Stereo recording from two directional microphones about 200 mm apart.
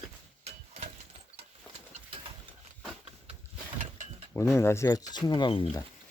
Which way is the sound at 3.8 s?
35° right (ahead or behind).